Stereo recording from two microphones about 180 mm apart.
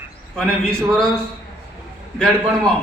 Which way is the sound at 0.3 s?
5° left (ahead or behind).